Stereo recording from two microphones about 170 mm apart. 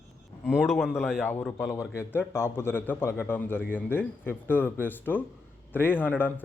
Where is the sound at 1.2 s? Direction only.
10° left (ahead or behind).